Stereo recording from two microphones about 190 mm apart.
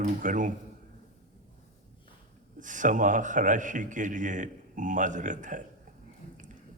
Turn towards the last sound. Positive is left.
turn(degrees=-40)  # may be behind; listen again after turning